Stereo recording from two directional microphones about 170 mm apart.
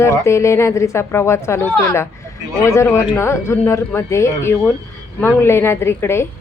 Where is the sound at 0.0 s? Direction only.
15° left (ahead or behind).